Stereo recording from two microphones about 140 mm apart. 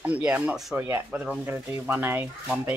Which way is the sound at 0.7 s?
15° right (ahead or behind).